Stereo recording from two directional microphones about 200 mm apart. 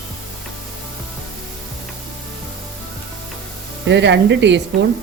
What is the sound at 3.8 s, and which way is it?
Speech, 60° right (ahead or behind).